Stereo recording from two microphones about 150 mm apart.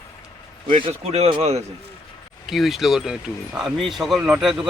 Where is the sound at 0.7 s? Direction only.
40° right (ahead or behind).